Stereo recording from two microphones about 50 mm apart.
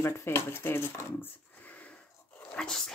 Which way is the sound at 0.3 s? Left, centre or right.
Left.